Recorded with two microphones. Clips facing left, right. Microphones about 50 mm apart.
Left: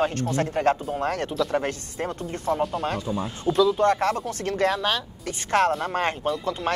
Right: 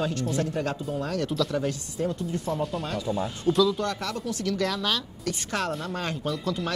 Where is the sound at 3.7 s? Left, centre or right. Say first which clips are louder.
Left 9 dB; left.